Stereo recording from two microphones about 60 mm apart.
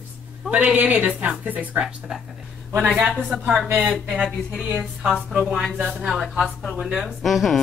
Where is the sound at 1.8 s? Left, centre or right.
Centre.